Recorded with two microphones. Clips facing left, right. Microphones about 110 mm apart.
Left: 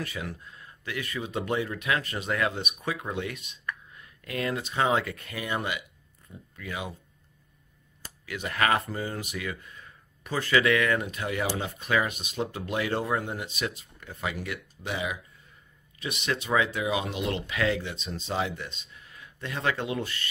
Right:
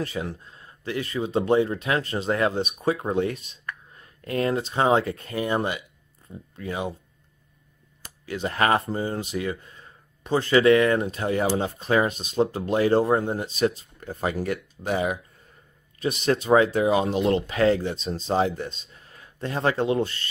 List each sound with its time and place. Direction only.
0.0 s speech: 30° right (ahead or behind)
8.3 s speech: 30° right (ahead or behind)